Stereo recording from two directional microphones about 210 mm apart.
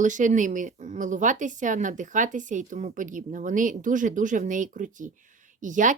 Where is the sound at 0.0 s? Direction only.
35° right (ahead or behind).